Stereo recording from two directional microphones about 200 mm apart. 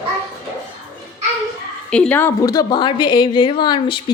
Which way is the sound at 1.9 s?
5° left (ahead or behind).